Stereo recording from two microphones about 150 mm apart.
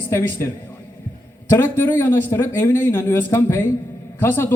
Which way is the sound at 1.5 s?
15° left (ahead or behind).